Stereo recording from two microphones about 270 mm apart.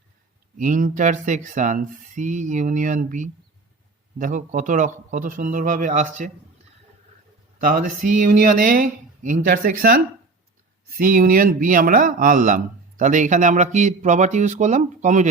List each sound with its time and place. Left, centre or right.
0.5 s speech: right
7.6 s speech: right
10.8 s speech: right